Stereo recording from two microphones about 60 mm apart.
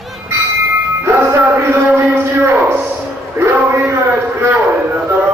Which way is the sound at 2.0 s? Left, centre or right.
Right.